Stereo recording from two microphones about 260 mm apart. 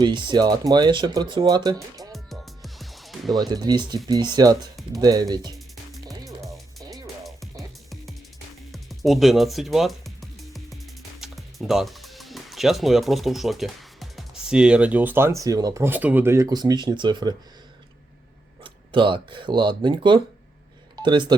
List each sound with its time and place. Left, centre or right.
0.0 s speech: centre
2.0 s music: centre
3.3 s speech: centre
6.1 s music: centre
8.7 s music: centre
11.2 s speech: centre
18.6 s speech: centre